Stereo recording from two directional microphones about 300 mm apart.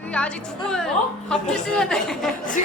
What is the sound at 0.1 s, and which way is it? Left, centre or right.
A woman's voice, centre.